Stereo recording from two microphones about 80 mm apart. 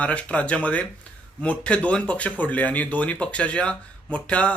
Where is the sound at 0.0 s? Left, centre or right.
Centre.